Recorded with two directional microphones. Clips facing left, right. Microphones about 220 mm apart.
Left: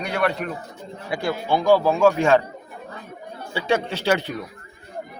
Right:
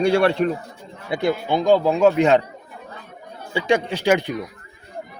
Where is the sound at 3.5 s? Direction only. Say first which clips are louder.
Right 3 dB; 15° right (ahead or behind).